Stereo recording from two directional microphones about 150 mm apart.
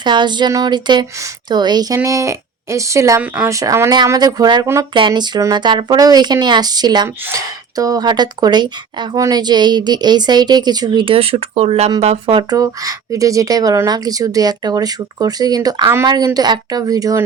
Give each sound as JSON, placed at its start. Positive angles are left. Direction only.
{"t": 0.0, "sound": "speech", "side_deg": -30}